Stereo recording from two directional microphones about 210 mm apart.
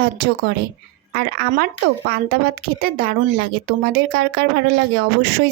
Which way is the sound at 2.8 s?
45° right (ahead or behind).